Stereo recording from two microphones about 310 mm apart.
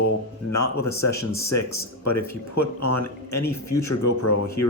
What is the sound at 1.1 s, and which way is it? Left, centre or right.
Speech, centre.